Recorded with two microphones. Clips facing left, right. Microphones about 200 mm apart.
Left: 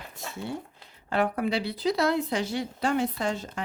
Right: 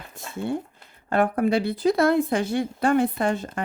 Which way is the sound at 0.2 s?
55° right (ahead or behind).